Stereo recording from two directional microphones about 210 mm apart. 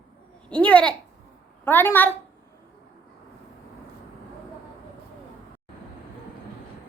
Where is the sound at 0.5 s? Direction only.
5° left (ahead or behind).